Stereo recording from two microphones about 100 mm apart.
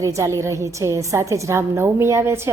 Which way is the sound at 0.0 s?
30° right (ahead or behind).